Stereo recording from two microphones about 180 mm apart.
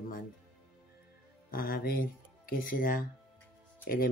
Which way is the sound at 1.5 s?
55° left (ahead or behind).